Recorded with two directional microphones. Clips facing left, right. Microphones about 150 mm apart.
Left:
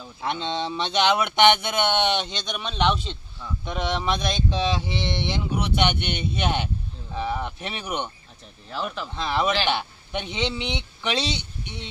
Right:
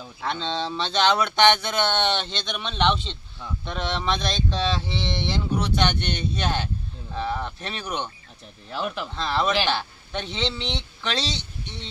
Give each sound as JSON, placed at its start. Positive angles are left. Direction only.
{"t": 0.2, "sound": "speech", "side_deg": 15}
{"t": 8.6, "sound": "speech", "side_deg": 0}
{"t": 9.1, "sound": "speech", "side_deg": 15}